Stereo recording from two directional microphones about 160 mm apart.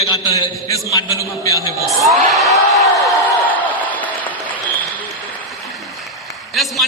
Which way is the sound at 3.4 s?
10° left (ahead or behind).